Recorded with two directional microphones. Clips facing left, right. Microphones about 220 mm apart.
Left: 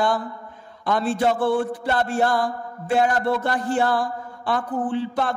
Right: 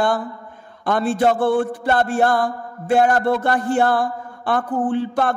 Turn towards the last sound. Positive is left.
turn(degrees=-50)  # may be behind; listen again after turning